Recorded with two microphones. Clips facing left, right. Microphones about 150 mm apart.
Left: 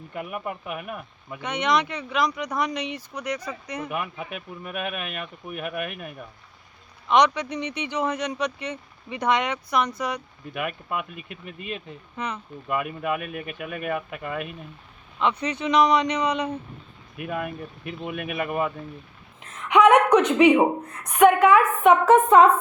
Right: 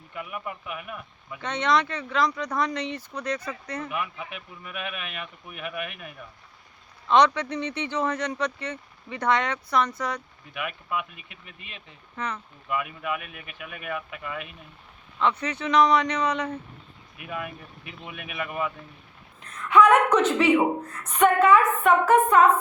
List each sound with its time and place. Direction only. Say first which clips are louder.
0.1 s speech: left 3 dB; 50° left (ahead or behind)
1.4 s speech: even; 15° left (ahead or behind)
3.8 s speech: left 4 dB; 45° left (ahead or behind)
7.1 s speech: even; 15° left (ahead or behind)
10.5 s speech: left 2 dB; 45° left (ahead or behind)
12.1 s speech: left 1 dB; 15° left (ahead or behind)
12.6 s speech: left 3 dB; 45° left (ahead or behind)
15.2 s speech: left 1 dB; 15° left (ahead or behind)
17.2 s speech: left 5 dB; 50° left (ahead or behind)
19.6 s speech: left 2 dB; 20° left (ahead or behind)
22.0 s speech: left 3 dB; 25° left (ahead or behind)